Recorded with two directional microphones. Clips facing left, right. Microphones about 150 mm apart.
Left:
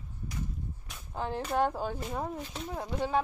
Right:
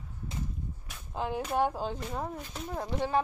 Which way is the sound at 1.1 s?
15° right (ahead or behind).